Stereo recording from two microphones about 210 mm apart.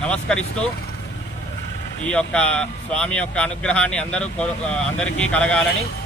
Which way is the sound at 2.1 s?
5° left (ahead or behind).